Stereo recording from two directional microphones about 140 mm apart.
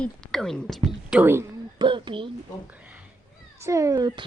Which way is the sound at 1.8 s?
35° right (ahead or behind).